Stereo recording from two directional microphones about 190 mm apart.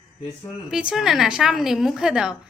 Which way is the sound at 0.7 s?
5° right (ahead or behind).